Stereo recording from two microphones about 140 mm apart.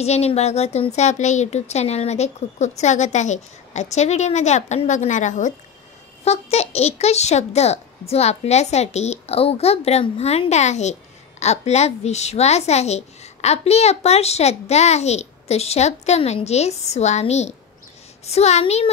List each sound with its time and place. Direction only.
0.0 s a woman's voice: 50° left (ahead or behind)
6.2 s a child's voice: 50° left (ahead or behind)